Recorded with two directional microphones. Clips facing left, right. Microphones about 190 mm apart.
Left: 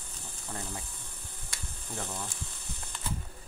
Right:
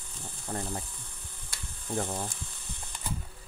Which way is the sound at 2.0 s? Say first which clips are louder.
Right 5 dB; 40° right (ahead or behind).